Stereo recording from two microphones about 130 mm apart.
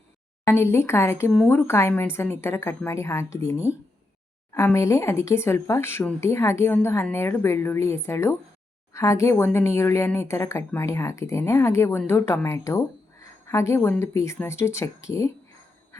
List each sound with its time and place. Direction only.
0.4 s speech: 20° left (ahead or behind)
4.5 s speech: 25° left (ahead or behind)